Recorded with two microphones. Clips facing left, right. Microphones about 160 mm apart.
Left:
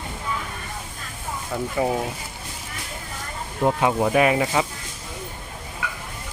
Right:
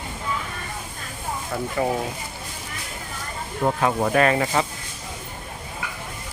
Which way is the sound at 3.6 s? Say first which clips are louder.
Left 2 dB; centre (ahead or behind).